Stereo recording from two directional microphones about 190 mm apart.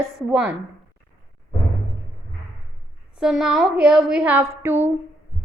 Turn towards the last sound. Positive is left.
turn(degrees=-10)  # may be behind; listen again after turning